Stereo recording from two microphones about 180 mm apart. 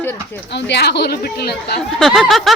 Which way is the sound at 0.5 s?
70° left (ahead or behind).